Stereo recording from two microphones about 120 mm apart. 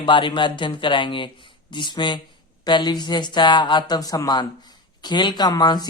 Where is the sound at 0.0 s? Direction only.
40° left (ahead or behind).